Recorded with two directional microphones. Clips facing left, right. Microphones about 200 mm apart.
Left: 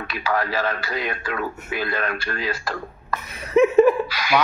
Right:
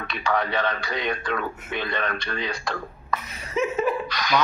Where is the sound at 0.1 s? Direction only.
5° left (ahead or behind).